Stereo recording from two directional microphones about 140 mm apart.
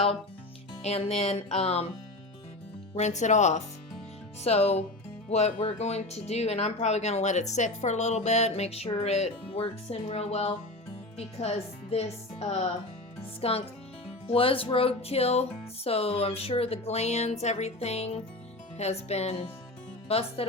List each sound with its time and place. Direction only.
0.8 s speech: 50° left (ahead or behind)
2.9 s speech: 55° left (ahead or behind)